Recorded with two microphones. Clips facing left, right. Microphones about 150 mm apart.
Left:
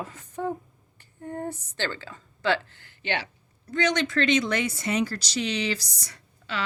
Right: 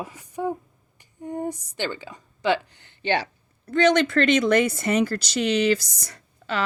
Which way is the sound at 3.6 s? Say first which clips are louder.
Right 7 dB; 55° right (ahead or behind).